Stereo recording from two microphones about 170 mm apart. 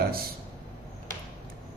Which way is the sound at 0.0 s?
60° right (ahead or behind).